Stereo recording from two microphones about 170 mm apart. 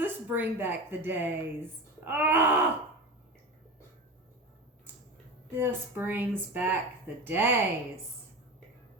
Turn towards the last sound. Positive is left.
turn(degrees=-10)  # may be behind; listen again after turning